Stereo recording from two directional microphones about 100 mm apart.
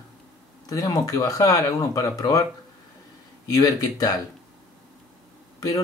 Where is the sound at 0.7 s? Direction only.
35° left (ahead or behind).